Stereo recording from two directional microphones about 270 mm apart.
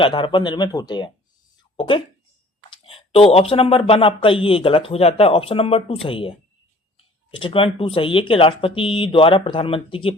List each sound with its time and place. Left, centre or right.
0.0 s speech: centre